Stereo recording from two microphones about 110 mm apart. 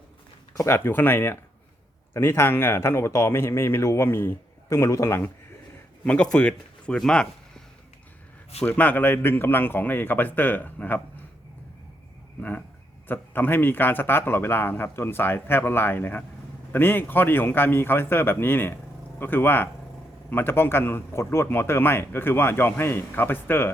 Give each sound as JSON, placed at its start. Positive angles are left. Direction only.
{"t": 0.5, "sound": "speech", "side_deg": 25}
{"t": 6.1, "sound": "speech", "side_deg": 10}
{"t": 8.6, "sound": "a man's voice", "side_deg": 15}
{"t": 12.4, "sound": "a man's voice", "side_deg": 15}